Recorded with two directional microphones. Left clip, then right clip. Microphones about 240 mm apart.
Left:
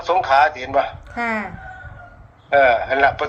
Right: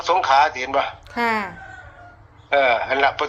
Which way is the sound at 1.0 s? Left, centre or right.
Right.